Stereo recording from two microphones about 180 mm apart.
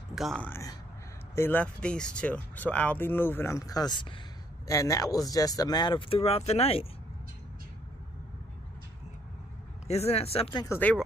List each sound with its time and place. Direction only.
0.1 s speech: centre (ahead or behind)
0.5 s speech: 20° left (ahead or behind); by 6.9 s 35° left (ahead or behind)
9.8 s speech: 35° left (ahead or behind)
10.7 s speech: 10° left (ahead or behind)